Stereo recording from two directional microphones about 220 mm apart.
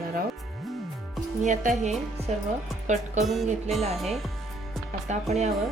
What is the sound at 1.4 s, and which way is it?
Speech, 35° right (ahead or behind).